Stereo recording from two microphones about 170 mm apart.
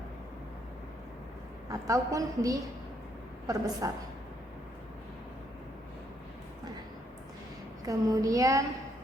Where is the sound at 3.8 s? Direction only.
20° right (ahead or behind).